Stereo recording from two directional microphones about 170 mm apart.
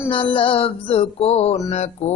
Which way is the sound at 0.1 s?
30° left (ahead or behind).